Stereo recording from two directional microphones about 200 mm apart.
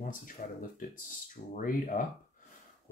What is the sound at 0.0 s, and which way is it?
Speech, 40° left (ahead or behind).